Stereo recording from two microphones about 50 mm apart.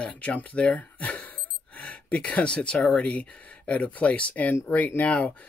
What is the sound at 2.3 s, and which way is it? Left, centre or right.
Speech, left.